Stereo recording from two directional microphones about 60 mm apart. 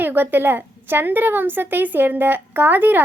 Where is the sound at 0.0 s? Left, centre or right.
Right.